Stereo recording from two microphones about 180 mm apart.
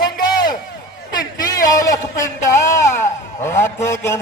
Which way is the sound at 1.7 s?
20° left (ahead or behind).